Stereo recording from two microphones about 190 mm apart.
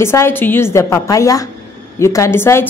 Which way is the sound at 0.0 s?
15° left (ahead or behind).